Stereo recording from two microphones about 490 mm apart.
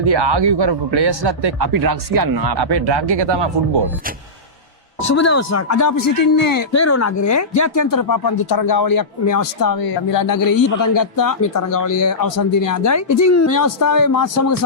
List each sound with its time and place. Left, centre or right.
0.0 s a man's voice: right
5.0 s speech: left